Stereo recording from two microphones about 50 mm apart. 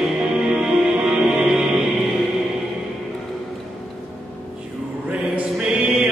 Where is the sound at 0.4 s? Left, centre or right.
Centre.